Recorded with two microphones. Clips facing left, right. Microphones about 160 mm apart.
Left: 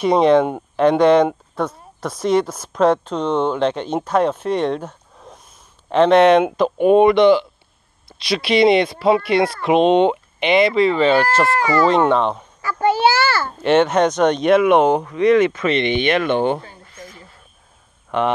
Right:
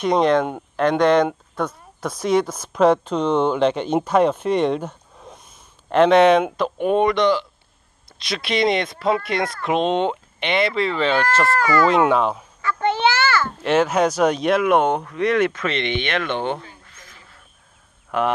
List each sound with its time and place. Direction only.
0.0 s speech: 5° left (ahead or behind)
8.3 s speech: 5° left (ahead or behind)
11.4 s speech: 35° left (ahead or behind)
11.9 s speech: 5° right (ahead or behind)
13.0 s a sound: 35° left (ahead or behind)
13.6 s speech: centre (ahead or behind)
16.9 s a sound: 25° left (ahead or behind)
18.1 s speech: 5° right (ahead or behind)